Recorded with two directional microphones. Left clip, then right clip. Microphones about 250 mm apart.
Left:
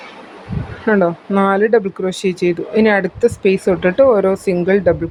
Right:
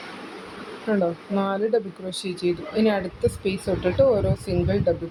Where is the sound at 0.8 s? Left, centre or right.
Left.